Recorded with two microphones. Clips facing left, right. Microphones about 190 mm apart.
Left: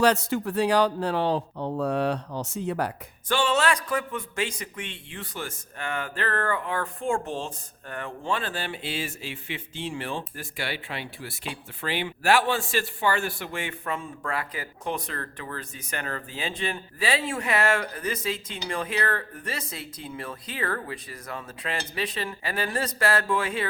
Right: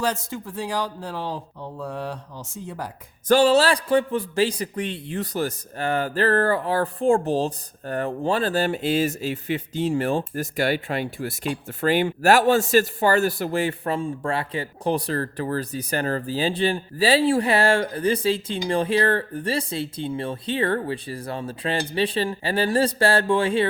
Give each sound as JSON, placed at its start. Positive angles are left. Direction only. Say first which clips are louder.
{"t": 0.0, "sound": "speech", "louder": "left 4 dB", "side_deg": 70}
{"t": 3.2, "sound": "a man's voice", "louder": "right 7 dB", "side_deg": -40}